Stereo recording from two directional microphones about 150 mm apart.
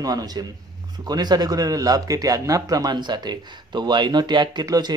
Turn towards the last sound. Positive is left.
turn(degrees=-25)  # may be behind; listen again after turning